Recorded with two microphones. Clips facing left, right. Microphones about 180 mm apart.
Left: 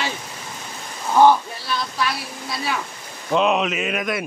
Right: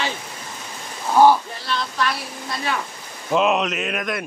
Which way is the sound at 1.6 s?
10° left (ahead or behind).